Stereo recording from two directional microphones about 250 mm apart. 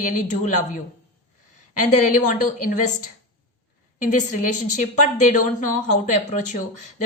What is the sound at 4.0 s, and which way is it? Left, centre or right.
Speech, left.